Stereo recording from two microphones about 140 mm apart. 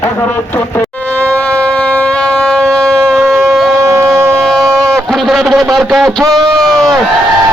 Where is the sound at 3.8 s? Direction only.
20° right (ahead or behind).